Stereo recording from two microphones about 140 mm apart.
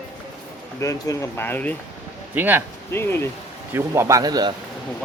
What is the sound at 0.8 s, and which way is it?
Speech, 25° left (ahead or behind).